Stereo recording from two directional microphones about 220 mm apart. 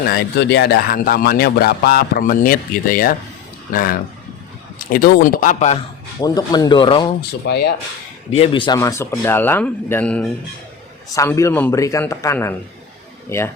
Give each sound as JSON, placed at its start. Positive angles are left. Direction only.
{"t": 0.0, "sound": "a man's voice", "side_deg": 45}
{"t": 6.1, "sound": "speech", "side_deg": 20}
{"t": 7.2, "sound": "speech", "side_deg": 50}
{"t": 8.3, "sound": "speech", "side_deg": 25}